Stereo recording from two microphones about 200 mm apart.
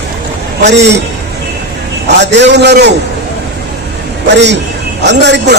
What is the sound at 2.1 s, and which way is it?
Speech, 60° right (ahead or behind).